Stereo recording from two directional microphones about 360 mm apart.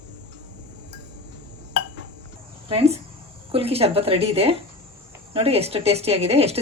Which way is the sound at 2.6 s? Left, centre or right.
Centre.